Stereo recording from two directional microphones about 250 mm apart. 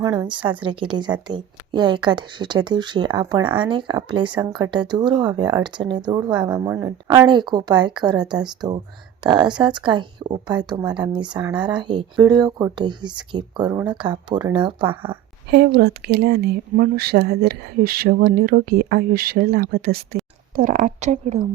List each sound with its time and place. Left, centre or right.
0.0 s a woman's voice: centre
9.5 s speech: centre
15.4 s a woman's voice: right